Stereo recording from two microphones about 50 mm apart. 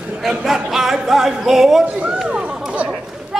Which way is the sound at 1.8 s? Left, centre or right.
Right.